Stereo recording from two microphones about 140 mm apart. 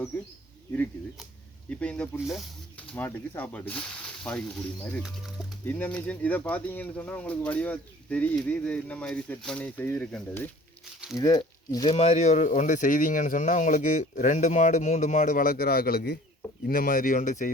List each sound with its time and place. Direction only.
1.7 s speech: 10° left (ahead or behind)
2.9 s speech: 10° left (ahead or behind)
11.2 s speech: 25° left (ahead or behind)
11.9 s speech: 50° left (ahead or behind)